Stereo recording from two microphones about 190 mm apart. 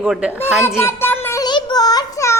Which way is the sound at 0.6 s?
15° left (ahead or behind).